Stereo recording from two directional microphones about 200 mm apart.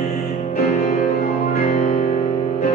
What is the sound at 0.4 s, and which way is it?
Music, 35° left (ahead or behind).